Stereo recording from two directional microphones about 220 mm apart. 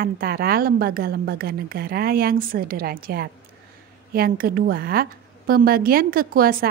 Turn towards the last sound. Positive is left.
turn(degrees=-40)  # may be behind; listen again after turning